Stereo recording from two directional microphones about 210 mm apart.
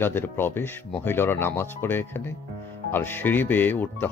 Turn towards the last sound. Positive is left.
turn(degrees=10)  # may be behind; listen again after turning